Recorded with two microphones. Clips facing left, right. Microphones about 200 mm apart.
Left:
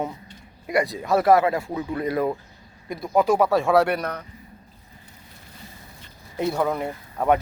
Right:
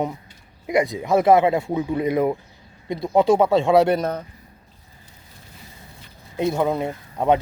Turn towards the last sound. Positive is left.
turn(degrees=-20)  # may be behind; listen again after turning